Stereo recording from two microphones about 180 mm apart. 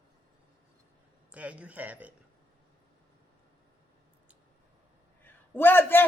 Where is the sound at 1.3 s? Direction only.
5° right (ahead or behind).